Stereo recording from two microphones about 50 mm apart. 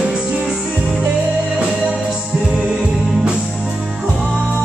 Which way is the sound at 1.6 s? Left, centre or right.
Centre.